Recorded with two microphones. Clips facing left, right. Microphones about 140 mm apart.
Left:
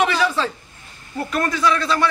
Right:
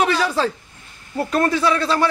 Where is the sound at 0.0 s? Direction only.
35° right (ahead or behind).